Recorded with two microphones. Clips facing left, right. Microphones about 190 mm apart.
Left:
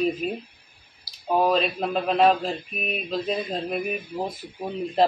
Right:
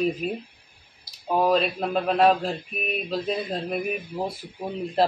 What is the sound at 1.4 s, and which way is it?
A man's voice, 5° right (ahead or behind).